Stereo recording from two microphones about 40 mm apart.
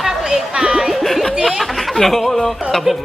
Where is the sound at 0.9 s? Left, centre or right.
Centre.